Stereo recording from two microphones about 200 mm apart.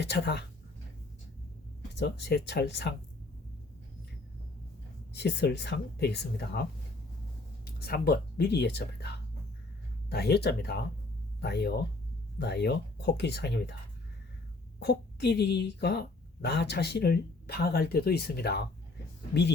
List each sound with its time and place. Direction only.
0.0 s a woman's voice: 55° left (ahead or behind)
2.0 s a woman's voice: 60° left (ahead or behind)
5.1 s a woman's voice: 55° left (ahead or behind)
14.8 s a woman's voice: 60° left (ahead or behind)